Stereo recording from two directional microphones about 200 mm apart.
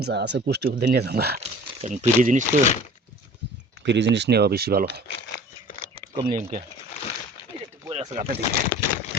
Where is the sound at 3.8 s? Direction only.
60° right (ahead or behind).